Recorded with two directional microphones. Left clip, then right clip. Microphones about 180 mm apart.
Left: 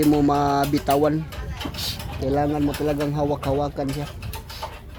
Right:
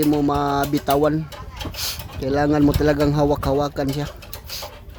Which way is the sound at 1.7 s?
10° right (ahead or behind).